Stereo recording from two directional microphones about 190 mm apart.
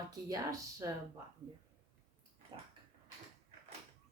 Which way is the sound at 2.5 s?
25° right (ahead or behind).